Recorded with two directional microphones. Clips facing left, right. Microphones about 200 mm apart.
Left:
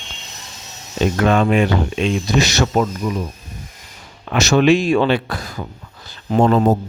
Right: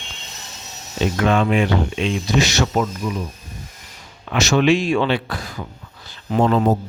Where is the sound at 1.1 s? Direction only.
45° left (ahead or behind).